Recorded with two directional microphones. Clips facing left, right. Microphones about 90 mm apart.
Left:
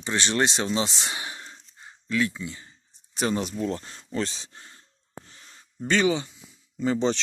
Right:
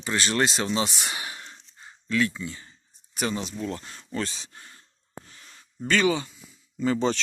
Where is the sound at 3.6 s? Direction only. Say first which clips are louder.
Left 3 dB; 30° left (ahead or behind).